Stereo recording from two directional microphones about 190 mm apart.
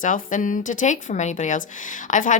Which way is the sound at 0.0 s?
45° left (ahead or behind).